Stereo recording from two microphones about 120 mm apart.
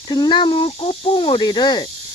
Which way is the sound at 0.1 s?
40° left (ahead or behind).